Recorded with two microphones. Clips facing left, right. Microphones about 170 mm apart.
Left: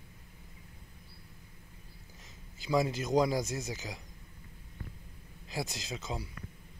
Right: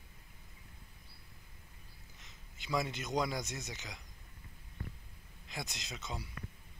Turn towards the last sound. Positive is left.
turn(degrees=30)  # may be behind; listen again after turning